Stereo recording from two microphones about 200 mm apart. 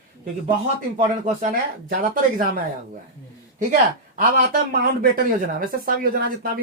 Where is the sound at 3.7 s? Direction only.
40° right (ahead or behind).